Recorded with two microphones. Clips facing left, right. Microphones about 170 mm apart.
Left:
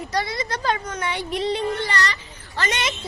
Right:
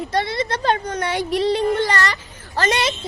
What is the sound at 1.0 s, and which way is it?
A child's voice, 40° right (ahead or behind).